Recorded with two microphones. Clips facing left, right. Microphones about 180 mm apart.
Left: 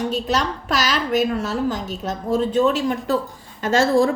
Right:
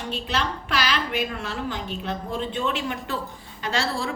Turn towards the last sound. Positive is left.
turn(degrees=45)  # may be behind; listen again after turning